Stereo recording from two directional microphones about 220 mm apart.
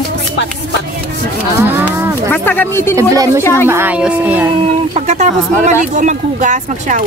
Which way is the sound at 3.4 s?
10° left (ahead or behind).